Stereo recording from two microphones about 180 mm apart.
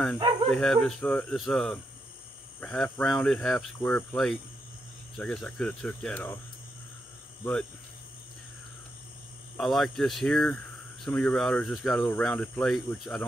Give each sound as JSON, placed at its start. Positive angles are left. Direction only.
{"t": 0.5, "sound": "speech", "side_deg": 0}
{"t": 9.6, "sound": "speech", "side_deg": 0}